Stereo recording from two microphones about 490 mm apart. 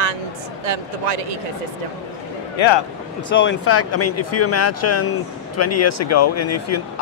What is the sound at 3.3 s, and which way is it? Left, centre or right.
Speech, left.